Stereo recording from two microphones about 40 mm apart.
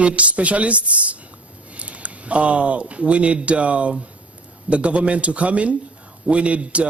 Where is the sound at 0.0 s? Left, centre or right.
Right.